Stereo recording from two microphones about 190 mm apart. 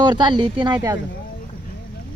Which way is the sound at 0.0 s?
25° right (ahead or behind).